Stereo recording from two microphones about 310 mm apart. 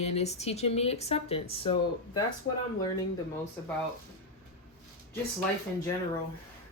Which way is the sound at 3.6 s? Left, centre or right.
Centre.